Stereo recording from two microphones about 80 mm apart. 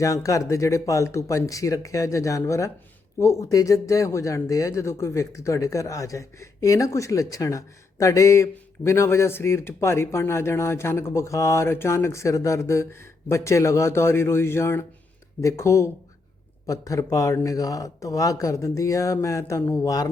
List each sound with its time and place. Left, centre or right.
0.0 s speech: left
19.8 s speech: left